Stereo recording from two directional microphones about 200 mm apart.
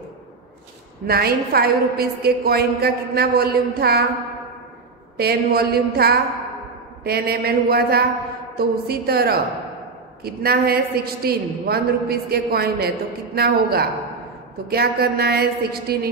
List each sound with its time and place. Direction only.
1.0 s a woman's voice: 50° right (ahead or behind)
5.1 s a woman's voice: 50° right (ahead or behind)